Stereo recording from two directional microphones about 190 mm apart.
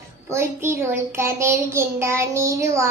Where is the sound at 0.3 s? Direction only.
15° right (ahead or behind).